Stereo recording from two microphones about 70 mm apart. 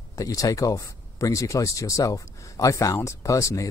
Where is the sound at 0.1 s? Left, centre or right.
Left.